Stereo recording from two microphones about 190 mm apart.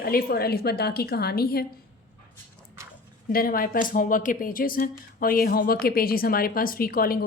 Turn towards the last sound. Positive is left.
turn(degrees=50)  # may be behind; listen again after turning